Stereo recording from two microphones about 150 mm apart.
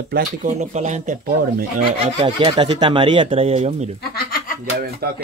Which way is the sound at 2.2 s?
35° right (ahead or behind).